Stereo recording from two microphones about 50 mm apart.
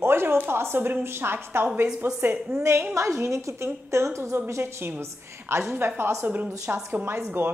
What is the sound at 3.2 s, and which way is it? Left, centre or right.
Speech, right.